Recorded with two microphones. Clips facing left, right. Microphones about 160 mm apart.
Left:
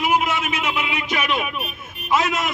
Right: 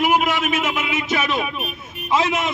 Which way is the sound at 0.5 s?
45° right (ahead or behind).